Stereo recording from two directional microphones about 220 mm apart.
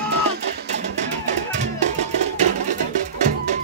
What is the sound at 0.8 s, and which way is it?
Music, 30° right (ahead or behind).